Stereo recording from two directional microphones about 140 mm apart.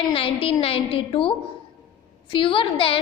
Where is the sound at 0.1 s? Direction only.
40° left (ahead or behind).